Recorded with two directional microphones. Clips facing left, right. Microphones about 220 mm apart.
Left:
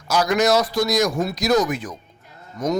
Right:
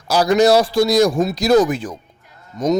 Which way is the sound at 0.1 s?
30° right (ahead or behind).